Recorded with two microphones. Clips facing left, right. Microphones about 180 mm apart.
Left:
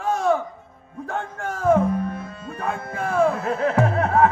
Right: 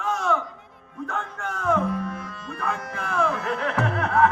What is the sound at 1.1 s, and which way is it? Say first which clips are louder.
Music: left 4 dB; 35° left (ahead or behind).